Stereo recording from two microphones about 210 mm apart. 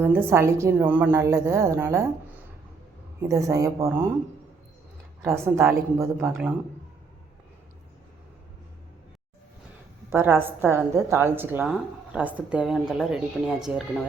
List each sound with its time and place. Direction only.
0.0 s a woman's voice: 10° right (ahead or behind)
5.2 s a woman's voice: 10° right (ahead or behind)
10.1 s a woman's voice: 10° right (ahead or behind)